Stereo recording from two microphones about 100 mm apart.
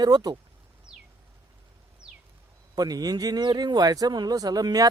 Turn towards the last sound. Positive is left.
turn(degrees=-40)  # may be behind; listen again after turning